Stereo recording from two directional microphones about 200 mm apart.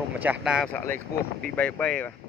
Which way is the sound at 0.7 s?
10° left (ahead or behind).